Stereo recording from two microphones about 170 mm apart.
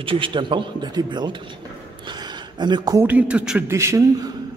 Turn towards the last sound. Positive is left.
turn(degrees=-15)  # may be behind; listen again after turning